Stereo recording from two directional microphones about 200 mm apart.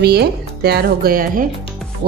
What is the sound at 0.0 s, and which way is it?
Speech, 55° right (ahead or behind).